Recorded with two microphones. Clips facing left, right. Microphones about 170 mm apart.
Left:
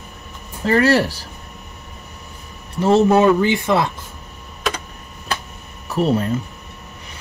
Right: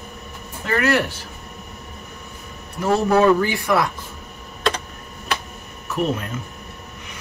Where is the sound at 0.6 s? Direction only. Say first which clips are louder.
Left 5 dB; 35° left (ahead or behind).